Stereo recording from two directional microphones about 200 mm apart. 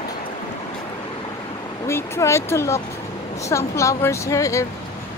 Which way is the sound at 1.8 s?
15° left (ahead or behind).